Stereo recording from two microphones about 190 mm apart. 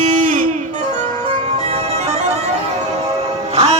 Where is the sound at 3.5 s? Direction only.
30° right (ahead or behind).